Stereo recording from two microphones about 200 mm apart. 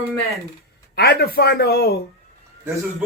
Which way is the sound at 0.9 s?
50° left (ahead or behind).